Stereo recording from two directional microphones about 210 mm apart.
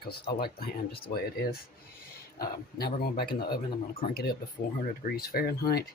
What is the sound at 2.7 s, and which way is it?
Speech, 50° left (ahead or behind).